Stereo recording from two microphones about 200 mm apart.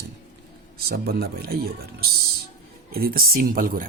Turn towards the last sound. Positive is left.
turn(degrees=-45)  # may be behind; listen again after turning